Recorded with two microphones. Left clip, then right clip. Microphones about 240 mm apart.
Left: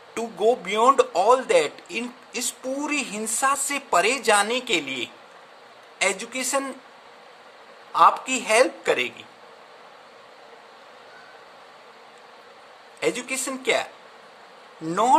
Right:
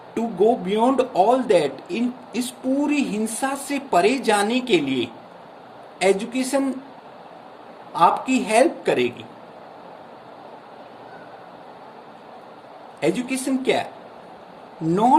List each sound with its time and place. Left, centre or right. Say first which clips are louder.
0.1 s a man's voice: right 3 dB; left
7.9 s a man's voice: even; left
13.0 s a man's voice: right 2 dB; left
14.8 s a man's voice: right 3 dB; left